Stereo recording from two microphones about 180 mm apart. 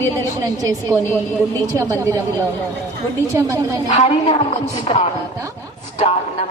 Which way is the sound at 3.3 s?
15° right (ahead or behind).